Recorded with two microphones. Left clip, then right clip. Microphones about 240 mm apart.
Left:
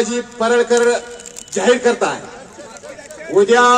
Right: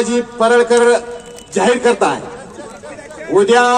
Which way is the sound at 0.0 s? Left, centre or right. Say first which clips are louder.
Right 4 dB; right.